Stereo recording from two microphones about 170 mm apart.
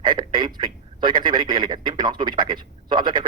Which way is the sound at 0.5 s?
25° right (ahead or behind).